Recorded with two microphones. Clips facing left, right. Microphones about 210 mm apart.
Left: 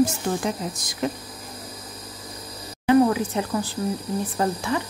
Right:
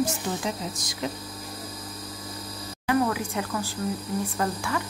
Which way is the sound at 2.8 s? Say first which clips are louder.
Left 7 dB; 25° left (ahead or behind).